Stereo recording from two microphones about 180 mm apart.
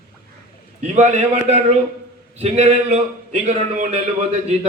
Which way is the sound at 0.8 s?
40° right (ahead or behind).